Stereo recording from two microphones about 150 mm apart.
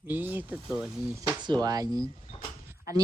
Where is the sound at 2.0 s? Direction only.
35° left (ahead or behind).